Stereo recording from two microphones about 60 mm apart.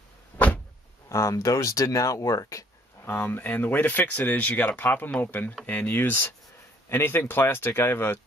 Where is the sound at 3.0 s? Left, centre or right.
Left.